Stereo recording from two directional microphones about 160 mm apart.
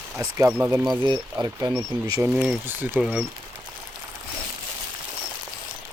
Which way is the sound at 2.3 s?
5° right (ahead or behind).